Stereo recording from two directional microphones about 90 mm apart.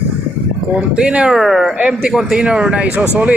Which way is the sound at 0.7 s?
10° right (ahead or behind).